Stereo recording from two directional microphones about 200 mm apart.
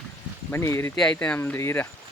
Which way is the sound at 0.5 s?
10° left (ahead or behind).